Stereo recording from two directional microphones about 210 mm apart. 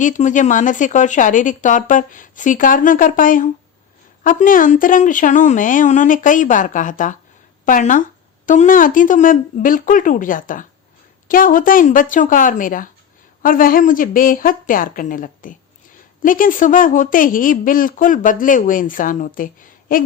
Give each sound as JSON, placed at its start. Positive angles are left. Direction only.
{"t": 0.0, "sound": "speech", "side_deg": 35}